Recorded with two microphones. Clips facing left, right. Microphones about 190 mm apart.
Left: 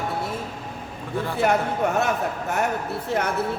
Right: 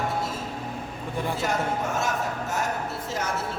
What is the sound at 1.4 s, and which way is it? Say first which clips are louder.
A man's voice: left 8 dB; 60° left (ahead or behind).